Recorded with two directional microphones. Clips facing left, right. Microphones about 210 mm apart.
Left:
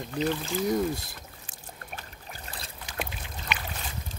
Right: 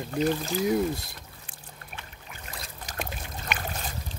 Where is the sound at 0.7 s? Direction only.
Centre (ahead or behind).